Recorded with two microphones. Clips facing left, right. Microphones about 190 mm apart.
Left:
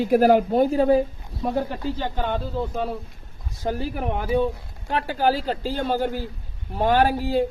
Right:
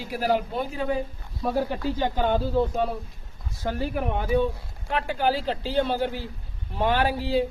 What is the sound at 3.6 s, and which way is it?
Speech, 35° left (ahead or behind).